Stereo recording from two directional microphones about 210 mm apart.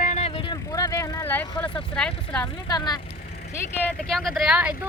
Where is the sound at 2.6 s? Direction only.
20° left (ahead or behind).